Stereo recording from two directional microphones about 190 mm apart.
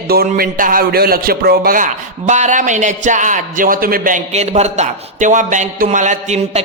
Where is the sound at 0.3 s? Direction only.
45° right (ahead or behind).